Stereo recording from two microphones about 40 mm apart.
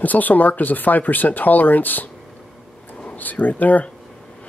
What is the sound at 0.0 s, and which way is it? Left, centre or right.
Speech, left.